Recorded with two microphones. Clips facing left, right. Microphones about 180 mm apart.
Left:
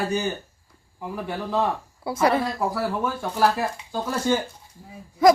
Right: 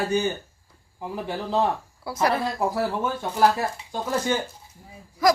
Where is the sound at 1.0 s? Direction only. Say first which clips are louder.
Even; 30° right (ahead or behind).